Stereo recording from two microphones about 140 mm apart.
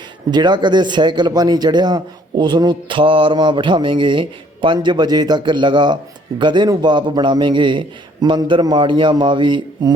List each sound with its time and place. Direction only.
0.3 s a man's voice: 30° right (ahead or behind)